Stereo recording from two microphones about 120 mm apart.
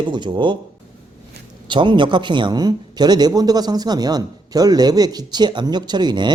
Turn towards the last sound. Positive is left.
turn(degrees=-35)  # may be behind; listen again after turning